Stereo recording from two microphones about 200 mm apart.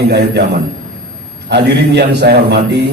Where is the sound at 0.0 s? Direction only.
55° right (ahead or behind).